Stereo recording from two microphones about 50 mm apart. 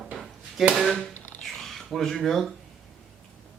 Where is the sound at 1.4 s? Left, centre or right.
Centre.